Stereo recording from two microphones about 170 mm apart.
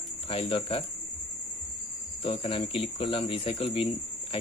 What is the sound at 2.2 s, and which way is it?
Speech, 30° left (ahead or behind).